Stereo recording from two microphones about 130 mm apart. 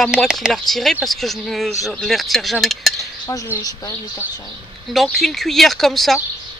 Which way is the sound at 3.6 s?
30° left (ahead or behind).